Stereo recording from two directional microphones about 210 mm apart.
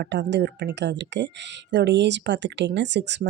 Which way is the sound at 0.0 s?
55° right (ahead or behind).